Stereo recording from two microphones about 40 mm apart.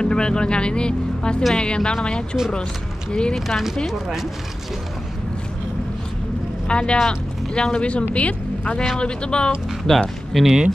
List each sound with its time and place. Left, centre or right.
0.0 s speech: left
3.1 s speech: left
3.3 s speech: centre
6.7 s speech: left
9.8 s speech: centre